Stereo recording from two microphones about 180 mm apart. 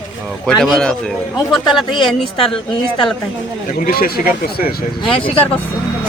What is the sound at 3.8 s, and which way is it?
Speech, 55° left (ahead or behind).